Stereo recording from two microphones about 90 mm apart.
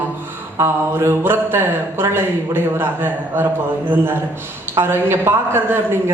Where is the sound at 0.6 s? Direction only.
25° right (ahead or behind).